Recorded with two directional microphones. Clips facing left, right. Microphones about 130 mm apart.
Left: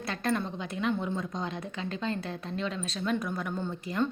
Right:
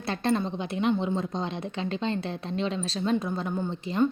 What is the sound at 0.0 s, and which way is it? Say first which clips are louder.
A woman's voice: right 4 dB; 30° right (ahead or behind).